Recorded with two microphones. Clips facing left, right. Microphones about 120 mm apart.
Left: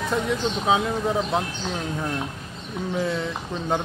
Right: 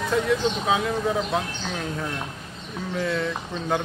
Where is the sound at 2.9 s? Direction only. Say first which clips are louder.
Even; 20° left (ahead or behind).